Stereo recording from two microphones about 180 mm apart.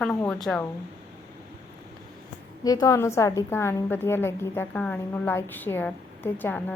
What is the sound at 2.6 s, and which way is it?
A woman's voice, 20° left (ahead or behind).